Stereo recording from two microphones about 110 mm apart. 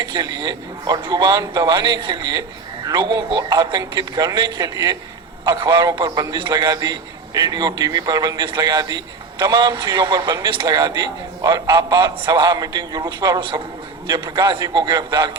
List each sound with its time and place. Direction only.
0.0 s a man's voice: 40° right (ahead or behind)